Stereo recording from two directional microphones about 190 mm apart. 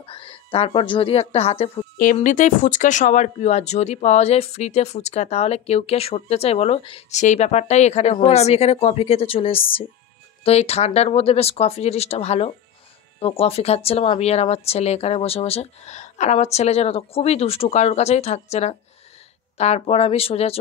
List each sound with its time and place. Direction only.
0.0 s speech: 30° left (ahead or behind)